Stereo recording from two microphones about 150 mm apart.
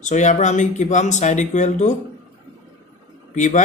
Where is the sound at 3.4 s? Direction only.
55° left (ahead or behind).